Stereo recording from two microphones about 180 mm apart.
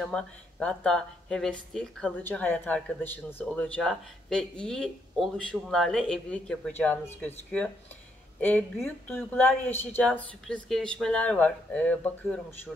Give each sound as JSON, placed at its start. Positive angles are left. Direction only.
{"t": 0.0, "sound": "a woman's voice", "side_deg": 5}